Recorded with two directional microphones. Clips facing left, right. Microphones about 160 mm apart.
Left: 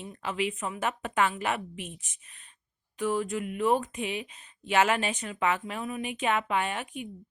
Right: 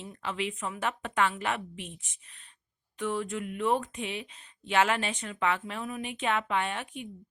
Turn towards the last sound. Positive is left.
turn(degrees=15)  # may be behind; listen again after turning